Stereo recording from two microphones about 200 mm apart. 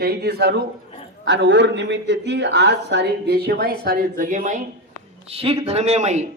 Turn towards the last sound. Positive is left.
turn(degrees=-35)  # may be behind; listen again after turning